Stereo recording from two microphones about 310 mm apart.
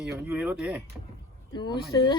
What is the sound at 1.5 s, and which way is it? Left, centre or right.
Speech, centre.